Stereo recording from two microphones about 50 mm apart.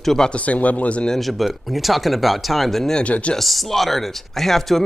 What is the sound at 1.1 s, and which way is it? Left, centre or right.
Speech, centre.